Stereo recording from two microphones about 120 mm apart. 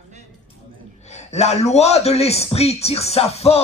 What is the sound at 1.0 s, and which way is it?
A man's voice, 70° left (ahead or behind).